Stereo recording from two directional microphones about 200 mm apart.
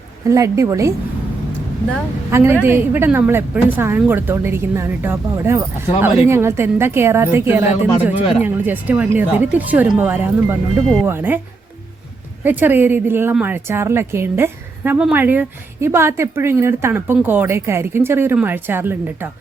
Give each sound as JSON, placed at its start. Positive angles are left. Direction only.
{"t": 0.3, "sound": "a woman's voice", "side_deg": -15}
{"t": 2.3, "sound": "a woman's voice", "side_deg": -10}
{"t": 12.5, "sound": "a woman's voice", "side_deg": -10}